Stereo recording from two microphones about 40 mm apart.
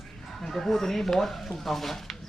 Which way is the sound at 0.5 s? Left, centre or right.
Centre.